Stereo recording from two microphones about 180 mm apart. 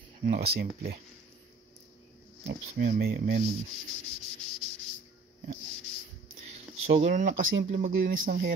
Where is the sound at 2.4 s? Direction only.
55° right (ahead or behind).